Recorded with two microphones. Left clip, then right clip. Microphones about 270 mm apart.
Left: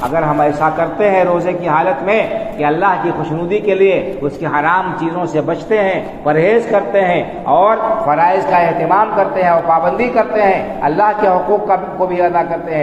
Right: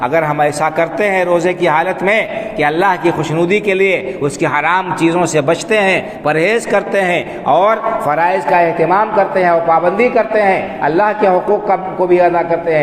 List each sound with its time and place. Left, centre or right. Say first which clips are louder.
0.1 s a man's voice: even; right